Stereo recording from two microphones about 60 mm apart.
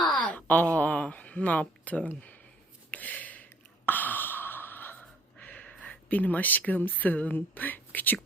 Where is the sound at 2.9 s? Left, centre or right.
Left.